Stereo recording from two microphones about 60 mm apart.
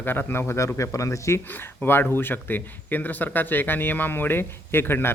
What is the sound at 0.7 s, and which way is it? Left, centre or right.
Speech, left.